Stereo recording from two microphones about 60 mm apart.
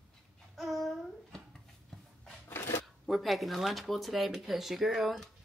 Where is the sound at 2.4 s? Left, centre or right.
Left.